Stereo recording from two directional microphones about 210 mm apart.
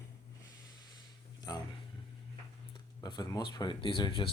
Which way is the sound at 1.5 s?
15° left (ahead or behind).